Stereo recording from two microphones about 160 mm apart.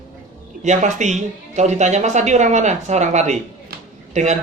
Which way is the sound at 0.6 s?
50° right (ahead or behind).